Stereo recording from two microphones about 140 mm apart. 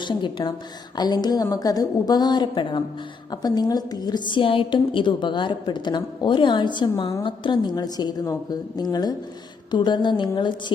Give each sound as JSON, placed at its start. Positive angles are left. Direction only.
{"t": 0.0, "sound": "a woman's voice", "side_deg": 35}